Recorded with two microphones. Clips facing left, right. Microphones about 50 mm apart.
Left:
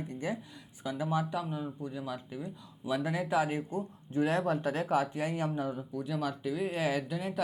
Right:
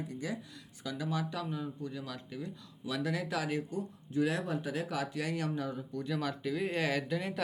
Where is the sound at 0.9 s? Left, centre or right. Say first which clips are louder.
Left 4 dB; left.